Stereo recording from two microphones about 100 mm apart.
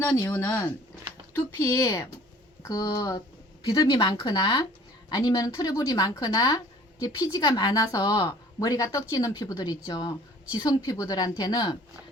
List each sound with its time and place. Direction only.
0.0 s speech: 25° left (ahead or behind); by 11.8 s 40° left (ahead or behind)